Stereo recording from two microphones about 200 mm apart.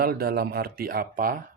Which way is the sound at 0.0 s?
50° right (ahead or behind).